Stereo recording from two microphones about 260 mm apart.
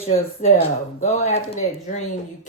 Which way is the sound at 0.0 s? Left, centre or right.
Left.